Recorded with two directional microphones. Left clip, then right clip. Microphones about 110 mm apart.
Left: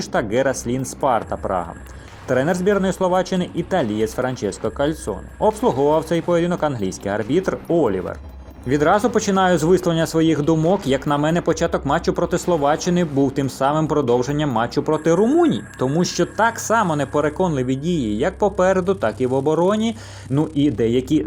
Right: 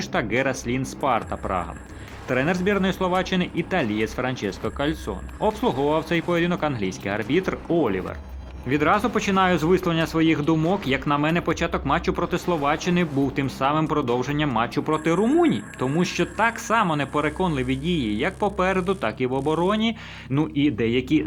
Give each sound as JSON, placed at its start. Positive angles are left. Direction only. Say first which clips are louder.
{"t": 0.0, "sound": "speech", "louder": "left 4 dB", "side_deg": 25}
{"t": 2.5, "sound": "speech", "louder": "left 4 dB", "side_deg": 25}
{"t": 7.0, "sound": "speech", "louder": "left 5 dB", "side_deg": 0}
{"t": 7.3, "sound": "speech", "louder": "left 3 dB", "side_deg": 25}
{"t": 7.9, "sound": "speech", "louder": "left 4 dB", "side_deg": 10}
{"t": 8.7, "sound": "speech", "louder": "left 4 dB", "side_deg": 35}